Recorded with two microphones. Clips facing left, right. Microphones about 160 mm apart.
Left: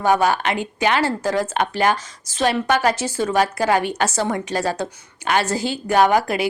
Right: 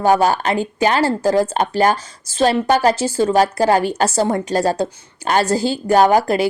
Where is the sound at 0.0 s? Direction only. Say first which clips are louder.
Right 3 dB; 35° right (ahead or behind).